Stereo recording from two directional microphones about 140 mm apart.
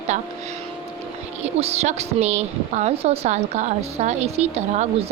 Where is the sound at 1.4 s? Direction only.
50° right (ahead or behind).